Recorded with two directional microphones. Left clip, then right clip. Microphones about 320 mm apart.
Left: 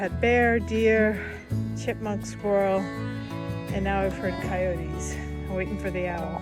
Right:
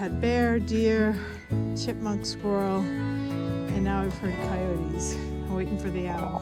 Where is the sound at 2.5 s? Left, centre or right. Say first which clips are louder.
Left 5 dB; centre.